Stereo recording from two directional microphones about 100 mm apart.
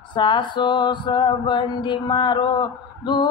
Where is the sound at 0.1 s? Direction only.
50° left (ahead or behind).